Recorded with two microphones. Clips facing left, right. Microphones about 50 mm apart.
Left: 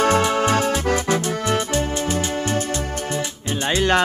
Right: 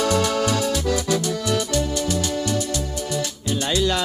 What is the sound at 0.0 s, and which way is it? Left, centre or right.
Music, left.